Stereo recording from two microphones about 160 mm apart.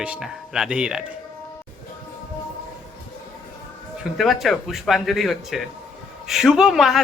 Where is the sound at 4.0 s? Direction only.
Centre (ahead or behind).